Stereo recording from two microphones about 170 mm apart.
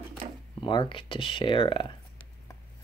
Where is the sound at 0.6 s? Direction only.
30° left (ahead or behind).